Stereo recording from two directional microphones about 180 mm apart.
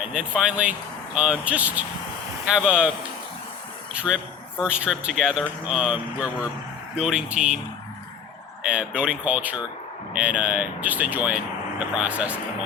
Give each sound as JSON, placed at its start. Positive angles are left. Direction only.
{"t": 0.0, "sound": "speech", "side_deg": -5}
{"t": 4.0, "sound": "speech", "side_deg": -5}
{"t": 8.6, "sound": "speech", "side_deg": -5}